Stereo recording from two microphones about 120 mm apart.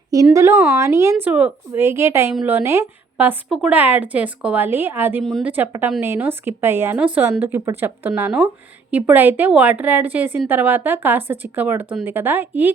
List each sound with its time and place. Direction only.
0.3 s a woman's voice: 25° right (ahead or behind)
1.2 s a woman's voice: 10° right (ahead or behind)